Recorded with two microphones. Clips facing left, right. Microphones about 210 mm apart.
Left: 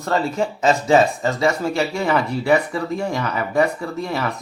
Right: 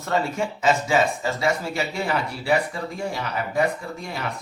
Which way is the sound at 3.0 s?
65° left (ahead or behind).